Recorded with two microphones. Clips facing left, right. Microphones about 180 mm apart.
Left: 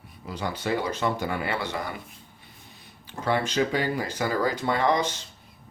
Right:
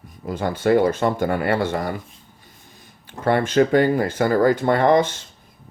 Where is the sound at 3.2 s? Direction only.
55° right (ahead or behind).